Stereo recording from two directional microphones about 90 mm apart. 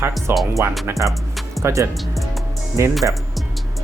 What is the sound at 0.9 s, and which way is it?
Speech, 40° right (ahead or behind).